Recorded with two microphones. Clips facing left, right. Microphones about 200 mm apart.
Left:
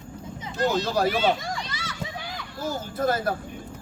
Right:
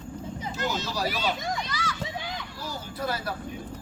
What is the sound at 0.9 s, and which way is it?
Speech, 55° left (ahead or behind).